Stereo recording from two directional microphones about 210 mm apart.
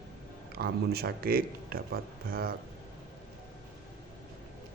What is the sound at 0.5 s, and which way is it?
Speech, 45° right (ahead or behind).